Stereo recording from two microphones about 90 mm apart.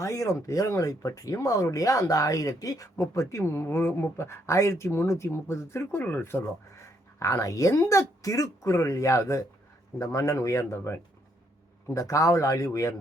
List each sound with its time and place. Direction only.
0.0 s speech: 35° left (ahead or behind)
11.9 s speech: 40° left (ahead or behind)